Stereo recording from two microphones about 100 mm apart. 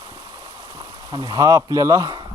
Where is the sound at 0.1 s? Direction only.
40° right (ahead or behind).